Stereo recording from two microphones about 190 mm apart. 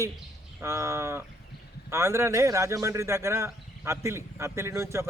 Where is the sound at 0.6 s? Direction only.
15° right (ahead or behind).